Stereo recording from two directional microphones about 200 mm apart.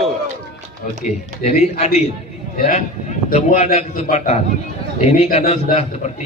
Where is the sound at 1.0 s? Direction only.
35° left (ahead or behind).